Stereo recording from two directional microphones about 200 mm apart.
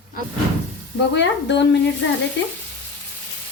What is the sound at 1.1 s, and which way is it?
Speech, 60° left (ahead or behind).